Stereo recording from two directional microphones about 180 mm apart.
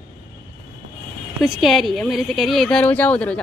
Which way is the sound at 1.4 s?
Centre (ahead or behind).